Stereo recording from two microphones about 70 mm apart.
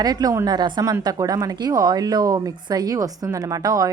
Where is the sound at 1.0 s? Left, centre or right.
Right.